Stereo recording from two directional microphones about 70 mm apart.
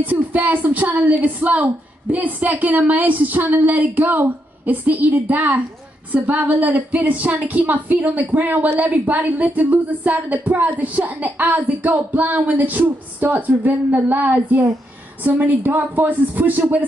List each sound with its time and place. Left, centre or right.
0.0 s a woman's voice: right